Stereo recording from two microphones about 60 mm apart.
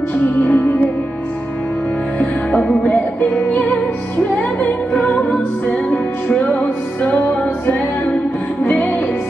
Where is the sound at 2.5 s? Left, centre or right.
Centre.